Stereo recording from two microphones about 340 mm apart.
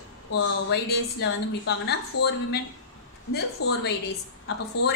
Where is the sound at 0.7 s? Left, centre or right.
Left.